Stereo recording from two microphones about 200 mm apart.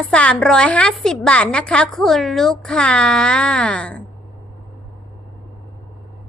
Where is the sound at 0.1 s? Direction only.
5° left (ahead or behind).